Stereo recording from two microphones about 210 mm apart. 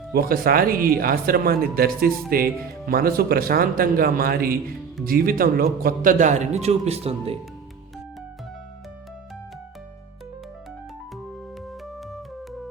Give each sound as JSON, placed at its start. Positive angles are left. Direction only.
{"t": 0.1, "sound": "a man's voice", "side_deg": -45}